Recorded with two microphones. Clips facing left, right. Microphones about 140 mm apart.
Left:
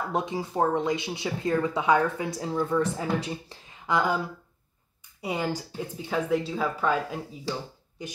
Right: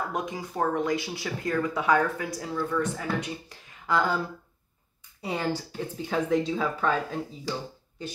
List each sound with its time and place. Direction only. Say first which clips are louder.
0.1 s speech: left 3 dB; 30° left (ahead or behind)
3.8 s speech: even; 15° left (ahead or behind)